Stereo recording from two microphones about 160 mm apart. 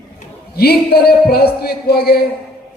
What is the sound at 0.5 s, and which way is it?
A man's voice, 75° left (ahead or behind).